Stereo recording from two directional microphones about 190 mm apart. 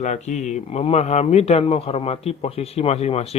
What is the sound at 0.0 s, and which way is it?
A man's voice, 40° left (ahead or behind).